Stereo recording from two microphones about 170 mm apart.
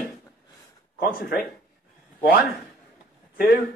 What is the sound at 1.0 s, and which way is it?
Speech, 65° left (ahead or behind).